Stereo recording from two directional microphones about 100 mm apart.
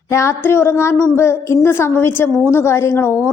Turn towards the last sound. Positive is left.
turn(degrees=25)  # may be behind; listen again after turning